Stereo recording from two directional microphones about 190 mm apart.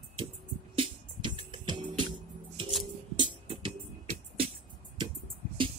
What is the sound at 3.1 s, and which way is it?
Music, 25° right (ahead or behind).